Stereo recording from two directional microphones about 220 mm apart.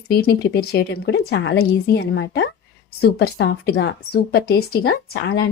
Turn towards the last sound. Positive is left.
turn(degrees=45)  # may be behind; listen again after turning